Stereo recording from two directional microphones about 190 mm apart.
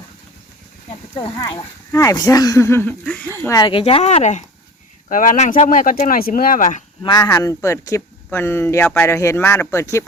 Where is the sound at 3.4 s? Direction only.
20° left (ahead or behind); by 6.8 s 45° left (ahead or behind).